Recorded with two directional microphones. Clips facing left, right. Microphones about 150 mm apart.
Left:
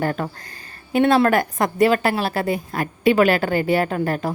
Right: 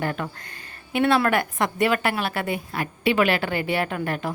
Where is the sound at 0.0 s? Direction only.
40° left (ahead or behind).